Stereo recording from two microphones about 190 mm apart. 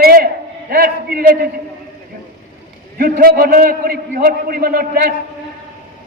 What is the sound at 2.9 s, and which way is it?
A man's voice, 50° right (ahead or behind).